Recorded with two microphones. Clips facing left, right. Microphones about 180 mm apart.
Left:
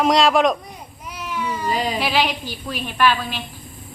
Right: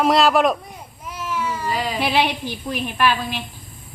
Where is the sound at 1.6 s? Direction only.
20° left (ahead or behind).